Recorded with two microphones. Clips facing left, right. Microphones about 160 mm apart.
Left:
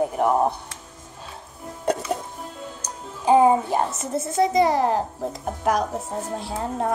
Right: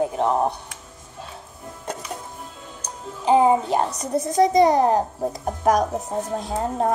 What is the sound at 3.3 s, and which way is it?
A child's voice, 15° right (ahead or behind).